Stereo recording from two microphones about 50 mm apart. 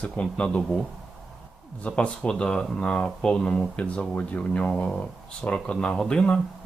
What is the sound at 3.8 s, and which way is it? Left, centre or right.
Speech, left.